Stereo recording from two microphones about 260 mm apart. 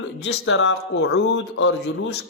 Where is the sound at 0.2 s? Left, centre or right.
Left.